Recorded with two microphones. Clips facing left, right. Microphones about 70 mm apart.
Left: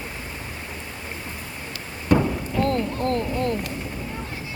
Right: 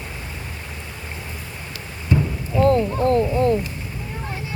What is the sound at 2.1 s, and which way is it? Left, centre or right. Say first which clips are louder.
Rain: left 3 dB; left.